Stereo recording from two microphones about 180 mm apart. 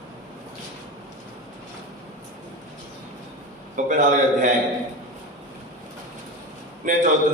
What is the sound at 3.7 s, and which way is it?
Speech, 45° right (ahead or behind).